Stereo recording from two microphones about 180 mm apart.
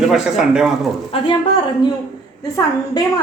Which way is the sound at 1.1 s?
30° left (ahead or behind).